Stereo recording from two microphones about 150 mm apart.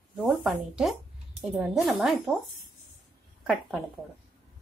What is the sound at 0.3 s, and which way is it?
Speech, 5° right (ahead or behind).